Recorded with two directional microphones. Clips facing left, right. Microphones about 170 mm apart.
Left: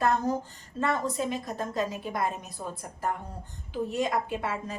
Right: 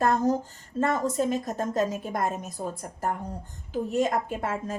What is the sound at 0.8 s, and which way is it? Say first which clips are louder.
A woman's voice: right 3 dB; 45° right (ahead or behind).